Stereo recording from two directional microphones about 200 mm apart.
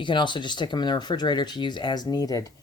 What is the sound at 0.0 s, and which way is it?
Speech, 25° left (ahead or behind).